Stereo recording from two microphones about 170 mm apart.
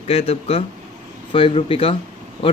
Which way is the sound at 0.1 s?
35° left (ahead or behind).